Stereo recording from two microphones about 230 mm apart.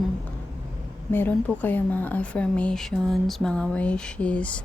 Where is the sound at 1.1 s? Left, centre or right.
Centre.